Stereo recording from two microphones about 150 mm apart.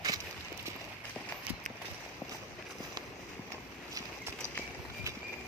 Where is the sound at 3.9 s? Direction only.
20° right (ahead or behind).